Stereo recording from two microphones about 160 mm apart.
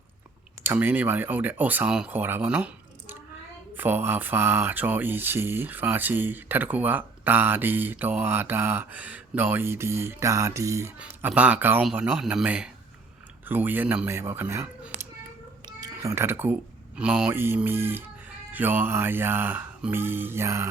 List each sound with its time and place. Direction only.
0.6 s speech: 15° right (ahead or behind)
11.0 s speech: 10° right (ahead or behind)
15.6 s cat: 25° right (ahead or behind)
17.0 s speech: 5° right (ahead or behind)